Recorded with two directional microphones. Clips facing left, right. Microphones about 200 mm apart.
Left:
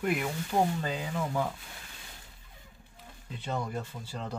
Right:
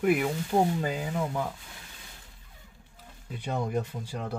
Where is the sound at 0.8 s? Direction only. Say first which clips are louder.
Right 3 dB; 10° right (ahead or behind).